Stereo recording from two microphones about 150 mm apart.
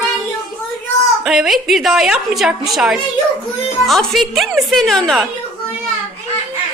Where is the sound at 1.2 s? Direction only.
Centre (ahead or behind).